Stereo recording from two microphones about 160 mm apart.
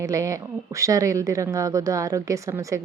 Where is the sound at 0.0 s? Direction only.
20° right (ahead or behind).